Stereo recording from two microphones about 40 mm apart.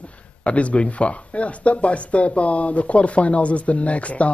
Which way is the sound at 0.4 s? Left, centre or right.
Left.